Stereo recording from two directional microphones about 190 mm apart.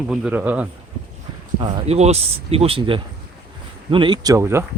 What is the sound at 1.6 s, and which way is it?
Speech, 30° right (ahead or behind).